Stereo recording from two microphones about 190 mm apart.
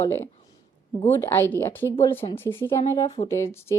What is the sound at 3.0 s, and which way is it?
Speech, 30° left (ahead or behind).